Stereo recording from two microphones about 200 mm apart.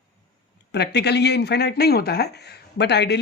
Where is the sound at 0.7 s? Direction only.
55° left (ahead or behind).